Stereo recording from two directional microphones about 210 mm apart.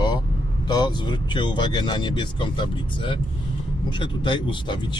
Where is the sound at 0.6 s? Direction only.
20° left (ahead or behind).